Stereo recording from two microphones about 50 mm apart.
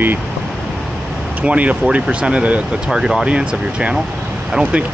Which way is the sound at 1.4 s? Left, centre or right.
Right.